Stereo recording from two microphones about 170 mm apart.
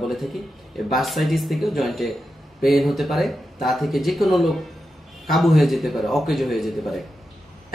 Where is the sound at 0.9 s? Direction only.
Centre (ahead or behind).